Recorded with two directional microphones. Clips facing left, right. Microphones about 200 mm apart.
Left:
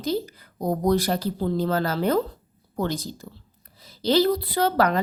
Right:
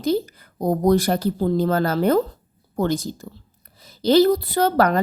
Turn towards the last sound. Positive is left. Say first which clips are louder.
# right 3 dB
turn(degrees=-45)  # may be behind; listen again after turning